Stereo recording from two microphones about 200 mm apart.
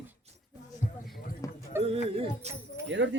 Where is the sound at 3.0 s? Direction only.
70° right (ahead or behind).